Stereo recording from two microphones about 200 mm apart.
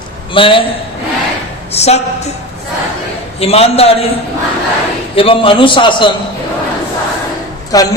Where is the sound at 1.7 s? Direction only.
30° left (ahead or behind).